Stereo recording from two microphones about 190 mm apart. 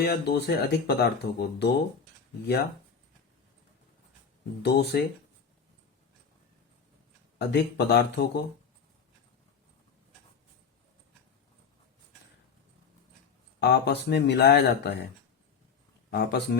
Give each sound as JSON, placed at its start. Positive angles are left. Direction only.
{"t": 0.0, "sound": "speech", "side_deg": 60}
{"t": 4.6, "sound": "speech", "side_deg": 60}
{"t": 7.3, "sound": "speech", "side_deg": 60}
{"t": 13.6, "sound": "speech", "side_deg": 60}
{"t": 16.0, "sound": "speech", "side_deg": 60}